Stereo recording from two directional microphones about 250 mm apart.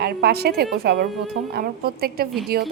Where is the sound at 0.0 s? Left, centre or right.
Right.